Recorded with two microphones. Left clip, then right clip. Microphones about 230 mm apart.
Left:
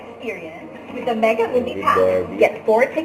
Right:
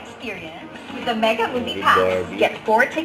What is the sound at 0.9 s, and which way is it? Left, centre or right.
A woman's voice, right.